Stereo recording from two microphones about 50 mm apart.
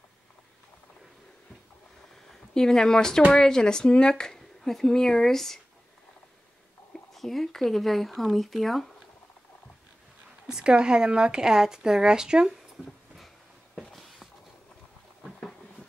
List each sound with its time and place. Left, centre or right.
2.2 s speech: centre
6.9 s speech: centre
10.4 s speech: centre
12.7 s a sound: centre